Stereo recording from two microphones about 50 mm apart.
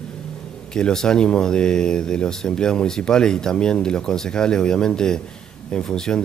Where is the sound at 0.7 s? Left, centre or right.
Centre.